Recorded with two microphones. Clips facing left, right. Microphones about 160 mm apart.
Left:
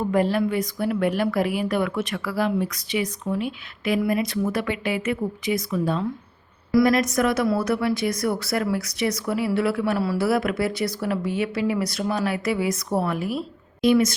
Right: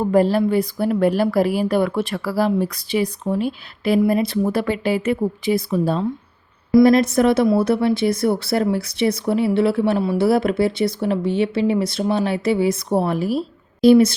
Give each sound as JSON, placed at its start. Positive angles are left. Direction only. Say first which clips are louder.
{"t": 0.0, "sound": "a woman's voice", "louder": "right 5 dB", "side_deg": -35}